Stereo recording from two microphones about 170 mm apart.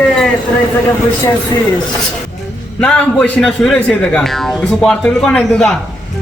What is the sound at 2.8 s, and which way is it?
Speech, 5° left (ahead or behind).